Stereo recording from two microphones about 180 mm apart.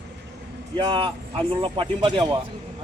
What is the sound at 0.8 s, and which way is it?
Speech, 30° right (ahead or behind).